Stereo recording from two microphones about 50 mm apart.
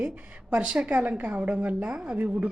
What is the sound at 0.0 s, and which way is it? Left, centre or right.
Speech, right.